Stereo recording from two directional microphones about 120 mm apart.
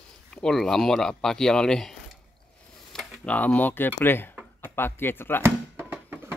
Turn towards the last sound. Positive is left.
turn(degrees=-20)  # may be behind; listen again after turning